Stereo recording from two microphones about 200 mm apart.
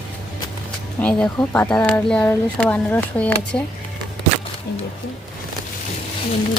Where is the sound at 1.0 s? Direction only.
5° left (ahead or behind).